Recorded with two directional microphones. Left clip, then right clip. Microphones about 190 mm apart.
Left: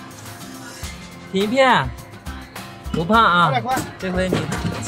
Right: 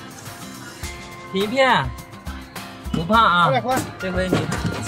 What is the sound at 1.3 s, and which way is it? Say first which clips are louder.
Speech: left 2 dB; centre (ahead or behind).